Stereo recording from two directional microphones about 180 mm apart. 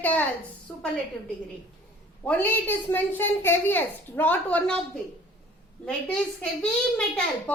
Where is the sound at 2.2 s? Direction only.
10° left (ahead or behind).